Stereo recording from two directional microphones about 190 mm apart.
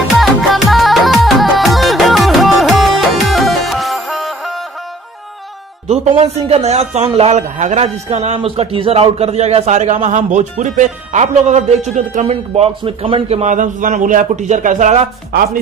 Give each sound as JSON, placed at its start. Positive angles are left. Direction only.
{"t": 0.2, "sound": "music", "side_deg": 0}
{"t": 5.9, "sound": "a man's voice", "side_deg": -35}